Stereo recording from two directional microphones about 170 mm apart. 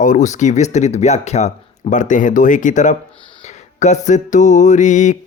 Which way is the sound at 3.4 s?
45° left (ahead or behind).